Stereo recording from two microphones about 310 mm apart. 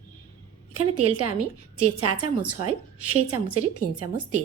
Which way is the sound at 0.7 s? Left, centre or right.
Right.